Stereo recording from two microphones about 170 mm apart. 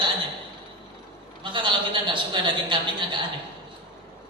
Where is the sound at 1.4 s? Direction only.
30° right (ahead or behind).